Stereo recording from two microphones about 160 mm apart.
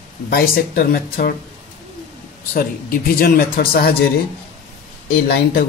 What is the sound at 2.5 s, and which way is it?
Speech, 65° left (ahead or behind).